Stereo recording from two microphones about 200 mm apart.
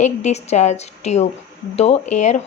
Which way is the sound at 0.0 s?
35° left (ahead or behind).